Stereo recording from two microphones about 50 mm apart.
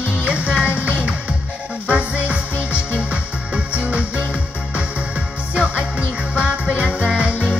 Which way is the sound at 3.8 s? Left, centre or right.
Right.